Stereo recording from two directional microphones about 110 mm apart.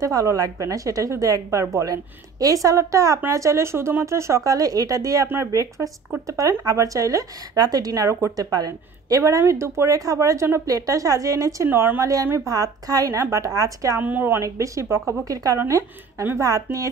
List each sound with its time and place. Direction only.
0.0 s a woman's voice: 30° right (ahead or behind)
13.9 s a woman's voice: 15° right (ahead or behind)